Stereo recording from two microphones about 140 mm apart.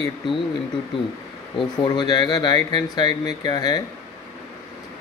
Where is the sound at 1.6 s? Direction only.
35° left (ahead or behind).